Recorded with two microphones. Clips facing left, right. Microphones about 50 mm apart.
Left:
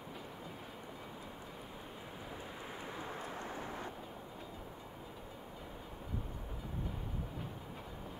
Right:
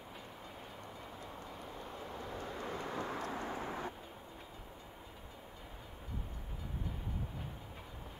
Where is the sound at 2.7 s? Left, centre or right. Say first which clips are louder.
Right 4 dB; right.